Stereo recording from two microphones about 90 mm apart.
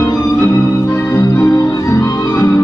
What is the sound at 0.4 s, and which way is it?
Organ, 25° left (ahead or behind).